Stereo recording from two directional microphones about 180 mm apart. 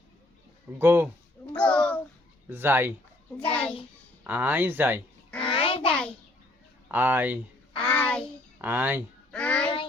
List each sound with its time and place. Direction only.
0.8 s speech: 10° right (ahead or behind)
1.5 s a sound: 5° left (ahead or behind)
2.5 s speech: 10° right (ahead or behind)
3.5 s a child's voice: 5° left (ahead or behind)
4.2 s speech: 10° right (ahead or behind)
5.4 s a sound: 30° left (ahead or behind)
6.8 s speech: 10° right (ahead or behind)
7.8 s a sound: 10° left (ahead or behind)
8.6 s speech: 10° right (ahead or behind)
9.3 s child singing: 5° left (ahead or behind)